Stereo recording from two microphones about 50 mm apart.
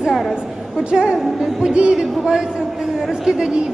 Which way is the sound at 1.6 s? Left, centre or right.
Centre.